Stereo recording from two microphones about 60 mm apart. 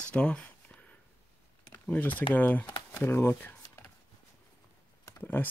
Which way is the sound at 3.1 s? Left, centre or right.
Left.